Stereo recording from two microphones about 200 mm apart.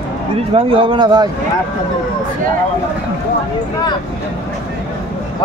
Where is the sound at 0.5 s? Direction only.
25° right (ahead or behind).